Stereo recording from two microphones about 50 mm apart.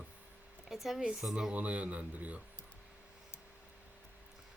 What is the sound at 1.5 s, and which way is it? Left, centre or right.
Speech, right.